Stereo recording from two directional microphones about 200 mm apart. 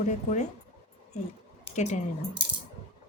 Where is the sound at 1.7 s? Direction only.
35° left (ahead or behind).